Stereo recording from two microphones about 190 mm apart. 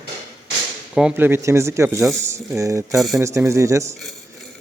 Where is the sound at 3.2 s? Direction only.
15° right (ahead or behind).